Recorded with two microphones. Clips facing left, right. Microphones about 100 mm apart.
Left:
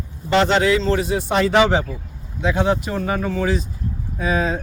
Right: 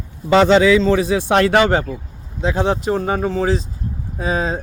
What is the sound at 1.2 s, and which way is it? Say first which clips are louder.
Speech: right 3 dB; 80° right.